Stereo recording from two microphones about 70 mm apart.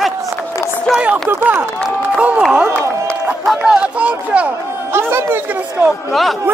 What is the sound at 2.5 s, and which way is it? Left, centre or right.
Crowd, right.